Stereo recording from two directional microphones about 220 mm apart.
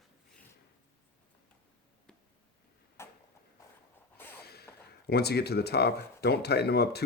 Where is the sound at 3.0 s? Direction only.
10° left (ahead or behind).